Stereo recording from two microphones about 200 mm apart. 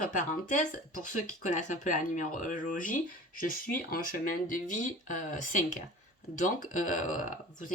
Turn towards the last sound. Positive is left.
turn(degrees=40)  # may be behind; listen again after turning